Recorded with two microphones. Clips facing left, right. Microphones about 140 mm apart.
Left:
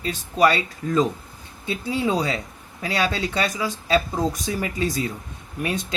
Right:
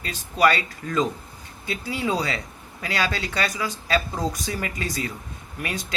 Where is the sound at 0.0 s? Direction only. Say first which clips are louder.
Left 2 dB; 25° left (ahead or behind).